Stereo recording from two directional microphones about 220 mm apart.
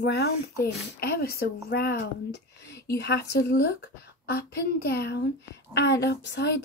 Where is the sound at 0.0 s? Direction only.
50° left (ahead or behind).